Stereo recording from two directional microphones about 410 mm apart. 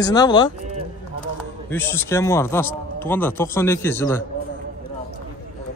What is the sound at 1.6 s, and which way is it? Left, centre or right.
Speech, centre.